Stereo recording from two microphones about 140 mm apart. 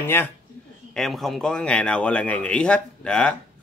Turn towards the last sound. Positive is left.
turn(degrees=5)  # may be behind; listen again after turning